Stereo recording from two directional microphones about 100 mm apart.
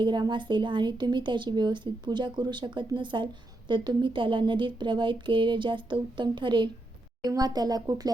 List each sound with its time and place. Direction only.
0.0 s a woman's voice: 50° right (ahead or behind)